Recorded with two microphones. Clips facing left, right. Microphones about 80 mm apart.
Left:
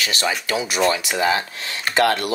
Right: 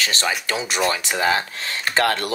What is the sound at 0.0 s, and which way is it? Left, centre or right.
Speech, right.